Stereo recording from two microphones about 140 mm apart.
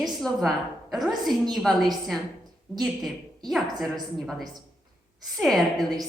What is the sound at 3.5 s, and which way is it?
A woman's voice, centre (ahead or behind).